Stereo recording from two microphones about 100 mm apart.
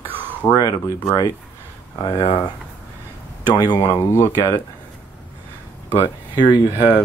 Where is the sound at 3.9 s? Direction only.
30° left (ahead or behind).